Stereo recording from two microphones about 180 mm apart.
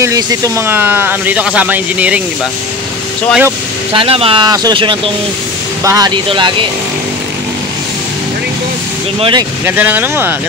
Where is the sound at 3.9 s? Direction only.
30° right (ahead or behind).